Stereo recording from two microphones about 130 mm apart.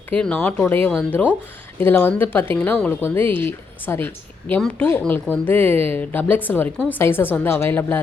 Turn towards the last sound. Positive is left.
turn(degrees=15)  # may be behind; listen again after turning